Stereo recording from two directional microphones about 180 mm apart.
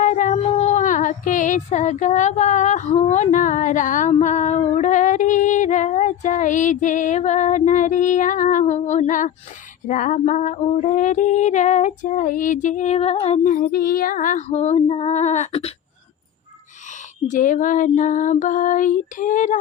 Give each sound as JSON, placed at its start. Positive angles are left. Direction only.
{"t": 0.0, "sound": "female singing", "side_deg": 45}
{"t": 17.2, "sound": "child singing", "side_deg": 45}